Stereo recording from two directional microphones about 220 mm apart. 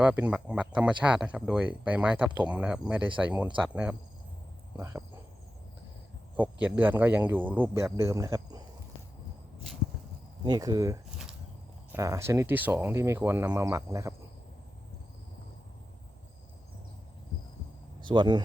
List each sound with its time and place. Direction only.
0.0 s speech: 5° right (ahead or behind)
6.3 s speech: 5° right (ahead or behind)
10.4 s speech: 15° right (ahead or behind)
18.0 s speech: 20° right (ahead or behind)